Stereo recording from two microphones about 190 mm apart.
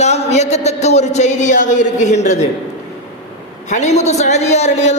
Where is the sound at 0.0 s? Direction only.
35° left (ahead or behind).